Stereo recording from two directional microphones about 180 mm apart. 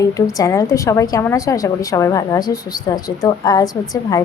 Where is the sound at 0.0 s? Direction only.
20° left (ahead or behind).